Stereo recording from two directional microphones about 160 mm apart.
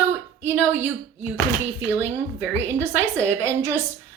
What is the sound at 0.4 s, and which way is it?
Speech, 15° right (ahead or behind).